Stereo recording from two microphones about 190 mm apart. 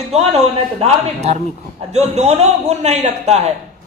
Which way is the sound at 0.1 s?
35° right (ahead or behind).